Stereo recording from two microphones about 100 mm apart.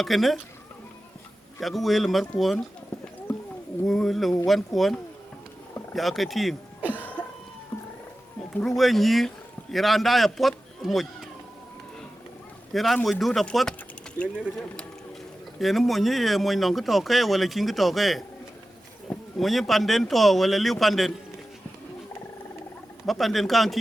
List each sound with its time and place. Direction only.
0.0 s speech: centre (ahead or behind)
1.5 s speech: centre (ahead or behind)
3.8 s speech: centre (ahead or behind)
6.9 s cough: 15° left (ahead or behind)
8.6 s a man's voice: centre (ahead or behind)
12.7 s speech: centre (ahead or behind)
15.6 s speech: centre (ahead or behind)
23.0 s speech: centre (ahead or behind)